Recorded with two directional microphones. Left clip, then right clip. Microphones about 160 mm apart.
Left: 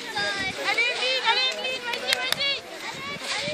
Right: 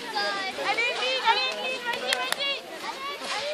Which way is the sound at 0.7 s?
55° right (ahead or behind).